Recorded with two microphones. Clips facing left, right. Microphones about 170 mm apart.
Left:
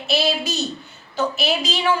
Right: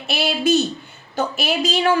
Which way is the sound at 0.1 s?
55° right (ahead or behind).